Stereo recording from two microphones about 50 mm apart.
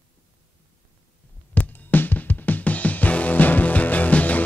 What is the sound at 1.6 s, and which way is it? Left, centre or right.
Music, left.